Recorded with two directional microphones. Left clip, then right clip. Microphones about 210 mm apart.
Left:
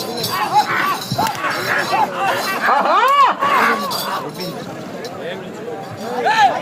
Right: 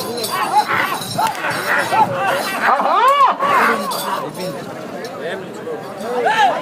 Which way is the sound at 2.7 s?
50° left (ahead or behind).